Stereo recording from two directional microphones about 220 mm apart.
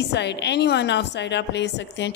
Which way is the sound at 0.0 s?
50° left (ahead or behind).